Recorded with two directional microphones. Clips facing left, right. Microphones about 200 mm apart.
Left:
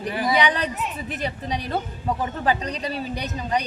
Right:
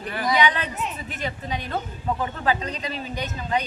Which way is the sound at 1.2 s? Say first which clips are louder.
Left 1 dB; 35° left (ahead or behind).